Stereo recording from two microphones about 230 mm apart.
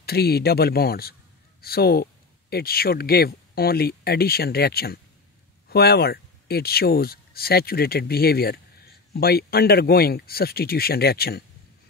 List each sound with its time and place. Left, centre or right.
0.0 s speech: left